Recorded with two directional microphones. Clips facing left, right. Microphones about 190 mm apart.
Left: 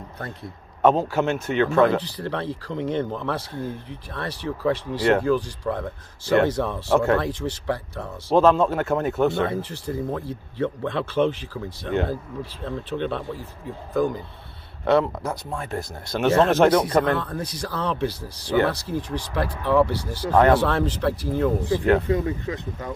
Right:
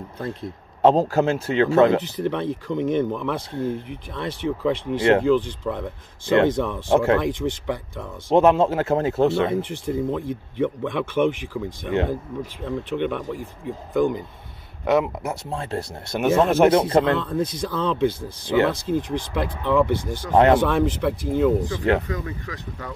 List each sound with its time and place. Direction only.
0.2 s a man's voice: 25° right (ahead or behind)
0.9 s speech: 40° right (ahead or behind); by 11.6 s 15° right (ahead or behind)
12.6 s speech: 15° right (ahead or behind)
15.5 s speech: 30° right (ahead or behind)
16.2 s speech: 15° right (ahead or behind)
16.6 s speech: 25° right (ahead or behind)
22.0 s speech: 30° left (ahead or behind)